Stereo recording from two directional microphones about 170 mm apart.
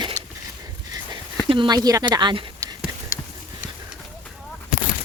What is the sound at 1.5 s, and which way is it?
Speech, 25° right (ahead or behind).